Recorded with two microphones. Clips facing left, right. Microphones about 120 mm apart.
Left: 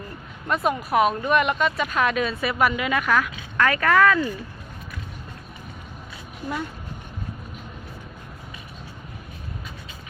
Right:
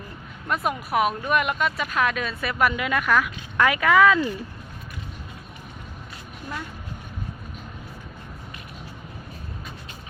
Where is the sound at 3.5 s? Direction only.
10° right (ahead or behind).